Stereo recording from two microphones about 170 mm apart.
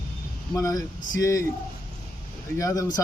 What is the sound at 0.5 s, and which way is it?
Speech, 20° left (ahead or behind).